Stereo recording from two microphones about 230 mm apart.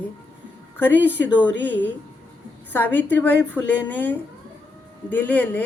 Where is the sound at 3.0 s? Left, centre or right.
Centre.